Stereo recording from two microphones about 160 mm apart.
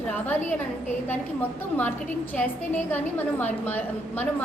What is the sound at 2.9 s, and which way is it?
A woman's voice, 10° left (ahead or behind).